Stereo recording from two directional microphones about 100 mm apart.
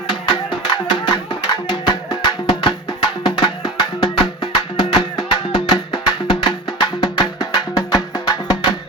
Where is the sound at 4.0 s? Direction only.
60° left (ahead or behind).